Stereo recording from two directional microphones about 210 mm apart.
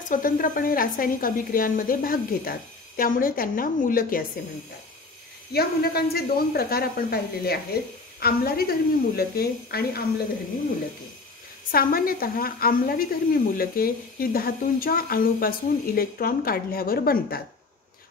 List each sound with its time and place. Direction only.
0.1 s a woman's voice: 40° left (ahead or behind)
5.5 s a woman's voice: 50° left (ahead or behind)
11.7 s a woman's voice: 45° left (ahead or behind)